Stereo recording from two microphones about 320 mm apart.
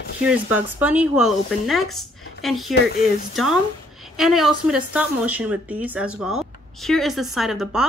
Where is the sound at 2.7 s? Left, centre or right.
Left.